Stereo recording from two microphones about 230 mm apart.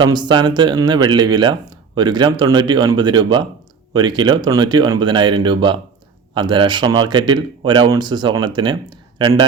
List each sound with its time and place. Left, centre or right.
0.0 s speech: centre